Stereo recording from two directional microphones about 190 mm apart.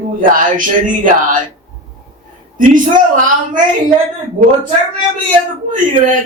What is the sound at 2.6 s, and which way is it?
Speech, 45° right (ahead or behind).